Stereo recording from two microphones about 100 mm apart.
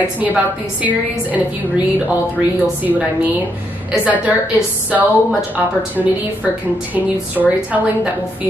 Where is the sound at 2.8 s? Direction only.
15° right (ahead or behind).